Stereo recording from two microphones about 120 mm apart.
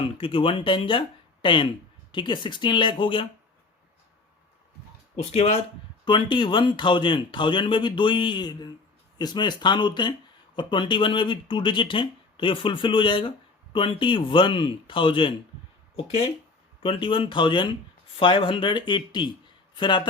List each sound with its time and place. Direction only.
0.2 s speech: 45° left (ahead or behind)
5.1 s speech: 55° left (ahead or behind)
6.1 s speech: 40° left (ahead or behind)
16.0 s speech: 55° left (ahead or behind); by 20.0 s 40° left (ahead or behind)